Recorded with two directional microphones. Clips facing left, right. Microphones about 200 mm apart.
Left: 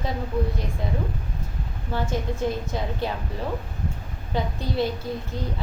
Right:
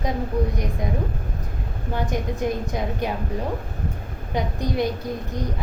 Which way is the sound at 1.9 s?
15° right (ahead or behind).